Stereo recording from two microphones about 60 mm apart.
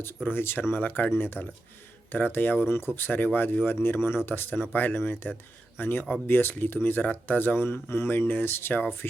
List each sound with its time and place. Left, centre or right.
0.3 s speech: left